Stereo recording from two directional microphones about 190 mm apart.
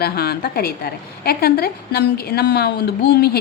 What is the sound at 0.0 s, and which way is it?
A woman's voice, 55° left (ahead or behind).